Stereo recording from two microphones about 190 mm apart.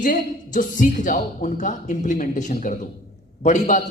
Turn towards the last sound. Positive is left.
turn(degrees=40)  # may be behind; listen again after turning